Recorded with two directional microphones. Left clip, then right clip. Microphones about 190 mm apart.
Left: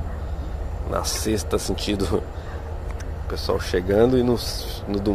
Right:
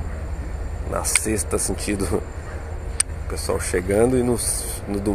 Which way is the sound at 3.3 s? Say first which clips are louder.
Left 1 dB; centre (ahead or behind).